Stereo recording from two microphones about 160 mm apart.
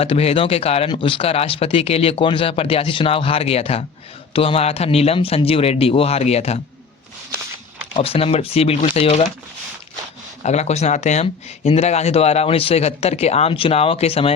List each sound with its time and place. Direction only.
0.0 s speech: 40° left (ahead or behind)
8.0 s speech: 35° left (ahead or behind)
10.4 s speech: 45° left (ahead or behind)